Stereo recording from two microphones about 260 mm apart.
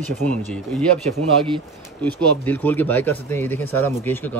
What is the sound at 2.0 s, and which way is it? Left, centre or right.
Speech, centre.